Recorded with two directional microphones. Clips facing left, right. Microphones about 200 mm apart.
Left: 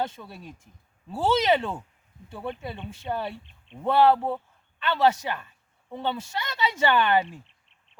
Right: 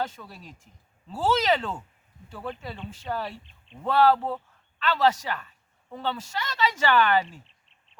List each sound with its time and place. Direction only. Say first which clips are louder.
0.0 s speech: left 1 dB; 25° left (ahead or behind)